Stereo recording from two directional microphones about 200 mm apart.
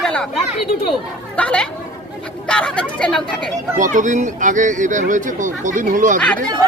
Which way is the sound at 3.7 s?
40° right (ahead or behind).